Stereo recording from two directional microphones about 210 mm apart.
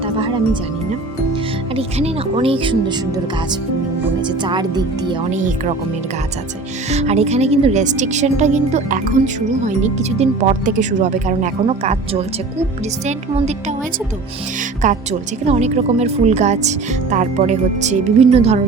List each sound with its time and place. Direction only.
1.7 s speech: 25° right (ahead or behind)
4.4 s speech: 20° right (ahead or behind)
5.3 s speech: 35° right (ahead or behind)
6.9 s speech: 30° right (ahead or behind)
14.8 s speech: 35° right (ahead or behind)